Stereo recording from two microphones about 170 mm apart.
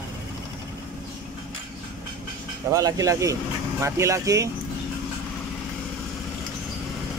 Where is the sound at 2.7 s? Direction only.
20° right (ahead or behind).